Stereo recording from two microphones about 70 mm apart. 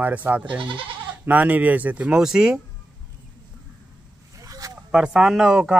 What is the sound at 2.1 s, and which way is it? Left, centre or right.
Speech, centre.